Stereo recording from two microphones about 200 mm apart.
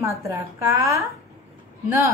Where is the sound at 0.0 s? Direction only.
15° right (ahead or behind).